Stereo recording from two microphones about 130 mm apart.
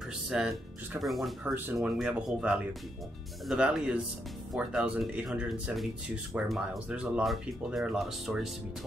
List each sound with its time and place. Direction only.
0.3 s speech: 5° right (ahead or behind)
1.4 s speech: 15° right (ahead or behind)
1.8 s speech: 5° right (ahead or behind)